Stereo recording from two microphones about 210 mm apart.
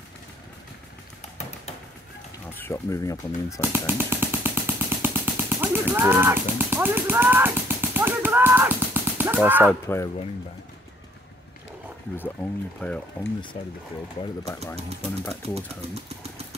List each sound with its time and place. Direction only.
2.5 s speech: 10° left (ahead or behind)
3.7 s vehicle: 10° right (ahead or behind)
9.7 s speech: 10° left (ahead or behind)
12.8 s speech: 5° left (ahead or behind)
15.5 s speech: 30° right (ahead or behind)